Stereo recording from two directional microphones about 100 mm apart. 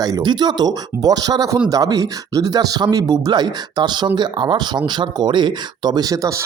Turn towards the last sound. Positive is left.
turn(degrees=-35)  # may be behind; listen again after turning